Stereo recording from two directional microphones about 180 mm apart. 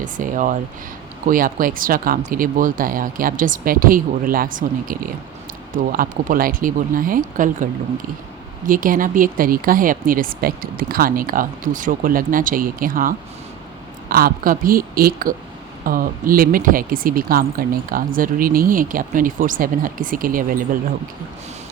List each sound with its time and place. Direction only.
0.0 s speech: 45° right (ahead or behind)